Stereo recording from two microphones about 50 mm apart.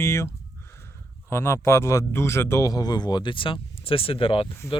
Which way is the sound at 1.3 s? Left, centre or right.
Left.